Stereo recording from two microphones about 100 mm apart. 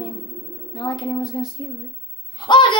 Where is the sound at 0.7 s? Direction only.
45° left (ahead or behind).